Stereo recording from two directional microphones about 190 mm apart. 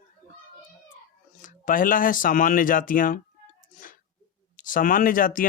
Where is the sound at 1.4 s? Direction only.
45° left (ahead or behind).